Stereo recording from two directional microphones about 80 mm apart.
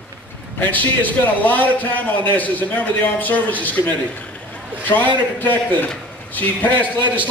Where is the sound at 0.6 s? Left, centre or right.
Left.